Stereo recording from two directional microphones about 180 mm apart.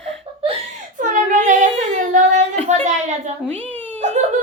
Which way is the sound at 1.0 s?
45° right (ahead or behind).